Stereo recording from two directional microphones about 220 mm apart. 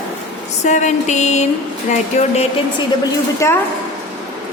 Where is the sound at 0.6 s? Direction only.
35° left (ahead or behind).